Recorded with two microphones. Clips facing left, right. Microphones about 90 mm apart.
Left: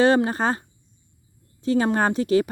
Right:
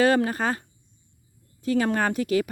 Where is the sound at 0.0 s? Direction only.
25° left (ahead or behind).